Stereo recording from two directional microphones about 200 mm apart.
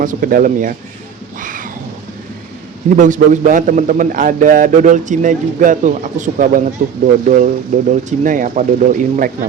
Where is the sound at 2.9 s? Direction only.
40° right (ahead or behind).